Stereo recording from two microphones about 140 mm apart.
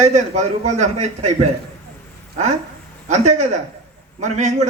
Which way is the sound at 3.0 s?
55° right (ahead or behind).